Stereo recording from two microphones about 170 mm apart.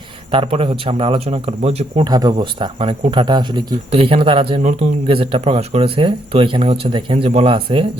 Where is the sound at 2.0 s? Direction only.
25° right (ahead or behind).